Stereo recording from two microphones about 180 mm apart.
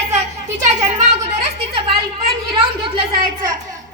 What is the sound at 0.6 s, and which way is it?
Speech, 40° right (ahead or behind).